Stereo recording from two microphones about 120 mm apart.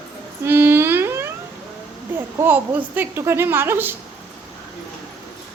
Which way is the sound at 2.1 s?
15° right (ahead or behind).